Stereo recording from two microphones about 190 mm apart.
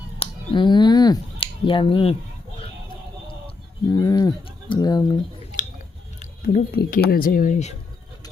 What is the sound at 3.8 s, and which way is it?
Speech, 20° left (ahead or behind).